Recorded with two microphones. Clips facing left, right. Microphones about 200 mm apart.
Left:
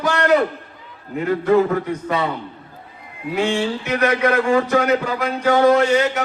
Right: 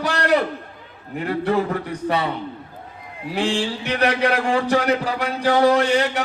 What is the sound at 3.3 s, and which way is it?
A man's voice, 30° right (ahead or behind).